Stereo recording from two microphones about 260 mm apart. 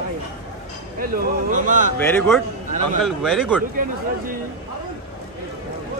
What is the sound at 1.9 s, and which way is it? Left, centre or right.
A man's voice, centre.